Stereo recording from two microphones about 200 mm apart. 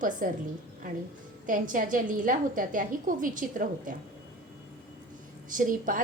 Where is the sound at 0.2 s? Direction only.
45° right (ahead or behind).